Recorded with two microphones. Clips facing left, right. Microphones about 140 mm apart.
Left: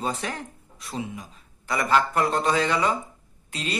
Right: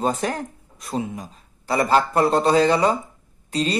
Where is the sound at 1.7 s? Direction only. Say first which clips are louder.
Right 4 dB; 35° right (ahead or behind).